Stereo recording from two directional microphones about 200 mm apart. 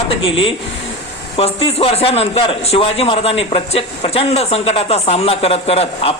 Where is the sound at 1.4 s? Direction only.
30° left (ahead or behind).